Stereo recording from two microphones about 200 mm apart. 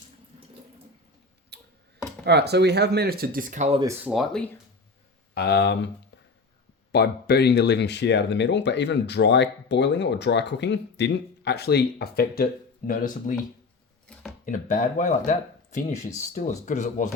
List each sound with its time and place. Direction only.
1.5 s tick-tock: 55° right (ahead or behind)
2.2 s speech: 55° right (ahead or behind); by 3.8 s 40° right (ahead or behind)
4.0 s speech: centre (ahead or behind)
5.3 s speech: 55° left (ahead or behind)
6.9 s speech: 55° left (ahead or behind)
14.1 s a sound: 5° left (ahead or behind)
14.4 s speech: 40° left (ahead or behind)